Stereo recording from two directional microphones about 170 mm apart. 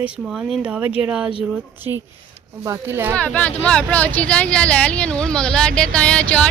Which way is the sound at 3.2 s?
10° left (ahead or behind).